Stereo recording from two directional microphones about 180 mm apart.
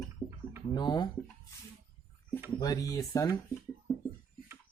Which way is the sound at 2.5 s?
20° left (ahead or behind).